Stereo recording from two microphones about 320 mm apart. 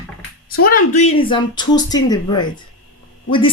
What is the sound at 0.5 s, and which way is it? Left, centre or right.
Speech, left.